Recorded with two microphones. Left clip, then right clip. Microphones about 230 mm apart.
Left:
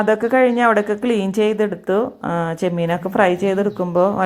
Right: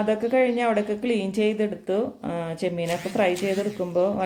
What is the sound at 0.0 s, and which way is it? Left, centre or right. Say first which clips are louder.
Speech: left 7 dB; left.